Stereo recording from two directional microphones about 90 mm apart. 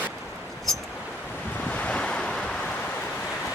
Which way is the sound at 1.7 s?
15° left (ahead or behind).